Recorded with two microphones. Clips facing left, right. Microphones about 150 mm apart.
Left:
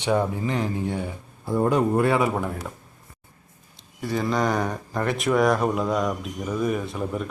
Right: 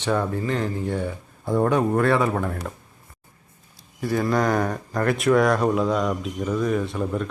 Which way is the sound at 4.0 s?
Centre (ahead or behind).